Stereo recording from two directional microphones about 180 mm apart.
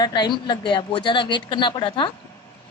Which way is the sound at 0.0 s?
25° left (ahead or behind).